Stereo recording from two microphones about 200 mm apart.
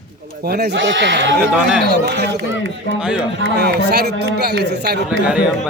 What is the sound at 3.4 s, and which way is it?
A man's voice, 55° right (ahead or behind).